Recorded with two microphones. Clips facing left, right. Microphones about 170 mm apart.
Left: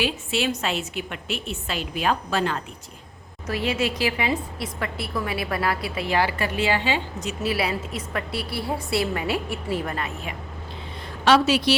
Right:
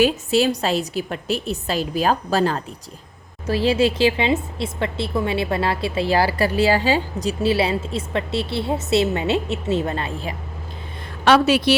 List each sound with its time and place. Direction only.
0.0 s a woman's voice: 40° right (ahead or behind)
11.3 s a woman's voice: 55° right (ahead or behind)